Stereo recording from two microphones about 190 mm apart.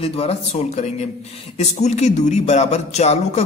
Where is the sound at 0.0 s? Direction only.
30° left (ahead or behind).